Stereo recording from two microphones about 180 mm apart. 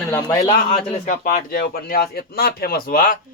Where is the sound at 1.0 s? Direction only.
45° left (ahead or behind).